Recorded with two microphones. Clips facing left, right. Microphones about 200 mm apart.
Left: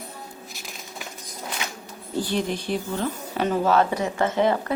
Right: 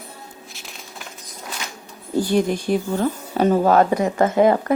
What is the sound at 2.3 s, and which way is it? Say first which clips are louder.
A woman's voice: right 7 dB; 45° right (ahead or behind).